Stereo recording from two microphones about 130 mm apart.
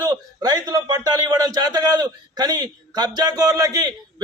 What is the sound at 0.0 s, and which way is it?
A man's voice, 30° right (ahead or behind).